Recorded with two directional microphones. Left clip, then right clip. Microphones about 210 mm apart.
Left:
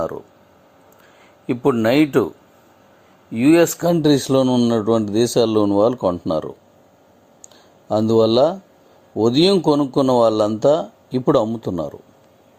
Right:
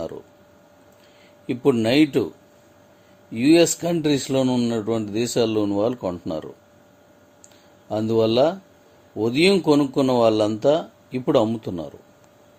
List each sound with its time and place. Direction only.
1.5 s speech: 10° left (ahead or behind)
3.3 s speech: 10° left (ahead or behind)
3.8 s a man's voice: 30° left (ahead or behind)
7.4 s a sound: 30° left (ahead or behind)
9.1 s a man's voice: 30° left (ahead or behind)